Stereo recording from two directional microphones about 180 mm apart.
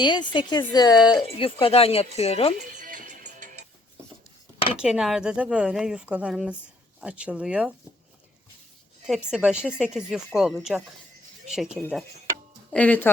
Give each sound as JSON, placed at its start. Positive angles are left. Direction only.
{"t": 0.0, "sound": "a woman's voice", "side_deg": 25}
{"t": 2.7, "sound": "music", "side_deg": -45}
{"t": 4.8, "sound": "speech", "side_deg": -5}
{"t": 9.0, "sound": "speech", "side_deg": -5}
{"t": 12.3, "sound": "tick-tock", "side_deg": 5}